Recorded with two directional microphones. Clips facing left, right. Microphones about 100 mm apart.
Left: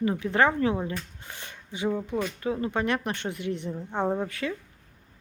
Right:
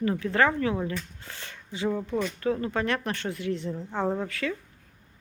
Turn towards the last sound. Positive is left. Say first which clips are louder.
# left 1 dB
turn(degrees=20)  # may be behind; listen again after turning